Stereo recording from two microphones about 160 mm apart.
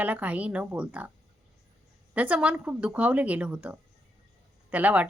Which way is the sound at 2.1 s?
10° right (ahead or behind).